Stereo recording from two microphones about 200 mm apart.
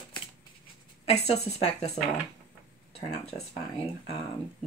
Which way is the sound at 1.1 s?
30° left (ahead or behind).